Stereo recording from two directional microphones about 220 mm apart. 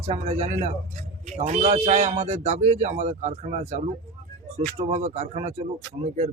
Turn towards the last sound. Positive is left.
turn(degrees=-30)  # may be behind; listen again after turning